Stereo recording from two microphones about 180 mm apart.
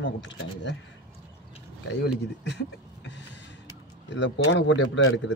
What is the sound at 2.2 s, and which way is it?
Speech, 70° left (ahead or behind).